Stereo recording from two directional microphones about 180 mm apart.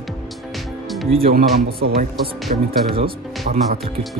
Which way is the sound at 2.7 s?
30° right (ahead or behind).